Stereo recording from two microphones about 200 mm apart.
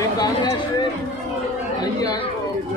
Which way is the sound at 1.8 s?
20° left (ahead or behind).